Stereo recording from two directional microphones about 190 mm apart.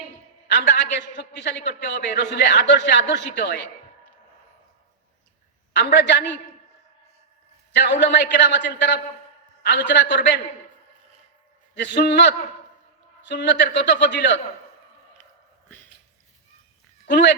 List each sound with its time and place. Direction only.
0.4 s a man's voice: 65° left (ahead or behind)
5.7 s a man's voice: 65° left (ahead or behind)
7.7 s a man's voice: 65° left (ahead or behind)
11.7 s a man's voice: 65° left (ahead or behind)
17.1 s a man's voice: 65° left (ahead or behind)